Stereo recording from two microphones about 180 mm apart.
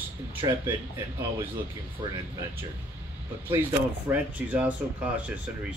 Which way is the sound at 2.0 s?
25° right (ahead or behind).